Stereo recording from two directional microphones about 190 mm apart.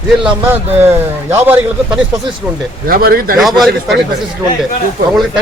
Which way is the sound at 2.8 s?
50° right (ahead or behind).